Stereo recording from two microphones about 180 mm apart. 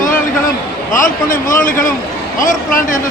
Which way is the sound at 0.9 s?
50° left (ahead or behind).